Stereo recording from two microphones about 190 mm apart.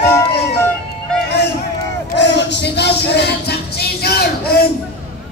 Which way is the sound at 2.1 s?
65° left (ahead or behind).